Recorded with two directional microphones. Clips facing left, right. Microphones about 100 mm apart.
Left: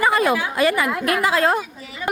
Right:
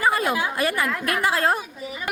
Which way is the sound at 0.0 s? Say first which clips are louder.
Left 4 dB; 90° left.